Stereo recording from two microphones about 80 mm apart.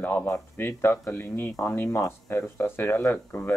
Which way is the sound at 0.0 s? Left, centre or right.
Left.